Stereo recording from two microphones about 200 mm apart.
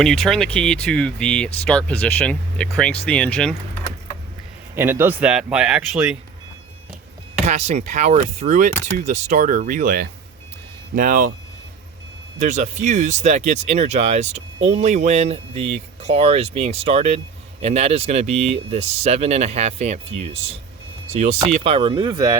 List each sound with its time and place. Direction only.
0.0 s speech: centre (ahead or behind)
4.7 s a man's voice: 10° right (ahead or behind)
7.4 s speech: 35° right (ahead or behind)
12.4 s speech: 35° right (ahead or behind)